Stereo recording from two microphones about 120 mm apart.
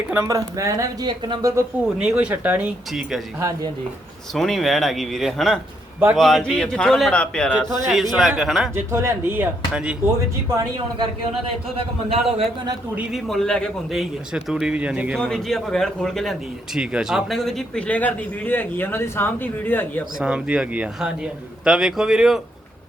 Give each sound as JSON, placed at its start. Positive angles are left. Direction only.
{"t": 0.1, "sound": "speech", "side_deg": -25}
{"t": 1.2, "sound": "speech", "side_deg": -40}
{"t": 2.0, "sound": "speech", "side_deg": -10}
{"t": 4.4, "sound": "a man's voice", "side_deg": 0}
{"t": 8.7, "sound": "speech", "side_deg": -20}
{"t": 10.5, "sound": "a man's voice", "side_deg": -35}
{"t": 13.0, "sound": "a man's voice", "side_deg": -5}
{"t": 15.2, "sound": "a man's voice", "side_deg": 5}
{"t": 20.1, "sound": "a man's voice", "side_deg": -10}